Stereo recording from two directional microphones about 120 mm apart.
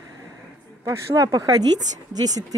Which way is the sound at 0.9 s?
30° right (ahead or behind).